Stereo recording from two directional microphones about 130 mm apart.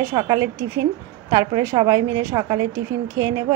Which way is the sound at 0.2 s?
35° right (ahead or behind).